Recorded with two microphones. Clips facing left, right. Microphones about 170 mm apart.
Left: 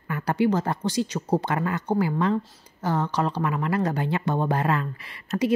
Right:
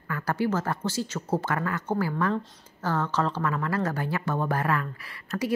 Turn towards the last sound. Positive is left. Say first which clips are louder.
# left 5 dB
turn(degrees=20)  # may be behind; listen again after turning